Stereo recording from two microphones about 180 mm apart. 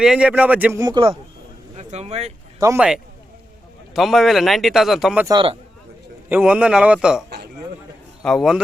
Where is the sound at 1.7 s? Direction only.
35° right (ahead or behind).